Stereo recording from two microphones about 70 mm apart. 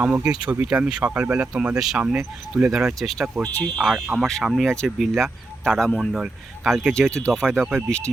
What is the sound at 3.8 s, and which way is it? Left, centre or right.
Speech, centre.